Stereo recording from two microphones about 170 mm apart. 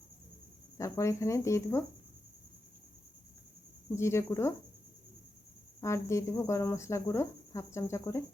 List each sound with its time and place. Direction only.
0.8 s speech: 15° left (ahead or behind)
3.9 s speech: 15° left (ahead or behind)
5.8 s speech: 15° left (ahead or behind)